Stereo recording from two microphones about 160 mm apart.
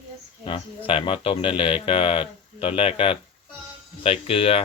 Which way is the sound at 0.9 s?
35° left (ahead or behind).